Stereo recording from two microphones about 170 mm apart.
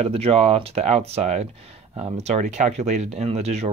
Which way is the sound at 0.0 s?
35° right (ahead or behind).